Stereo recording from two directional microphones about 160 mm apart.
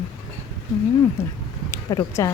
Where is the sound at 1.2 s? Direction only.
15° left (ahead or behind).